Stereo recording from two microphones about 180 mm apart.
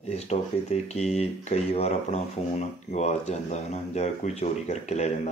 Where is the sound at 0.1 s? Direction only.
35° left (ahead or behind).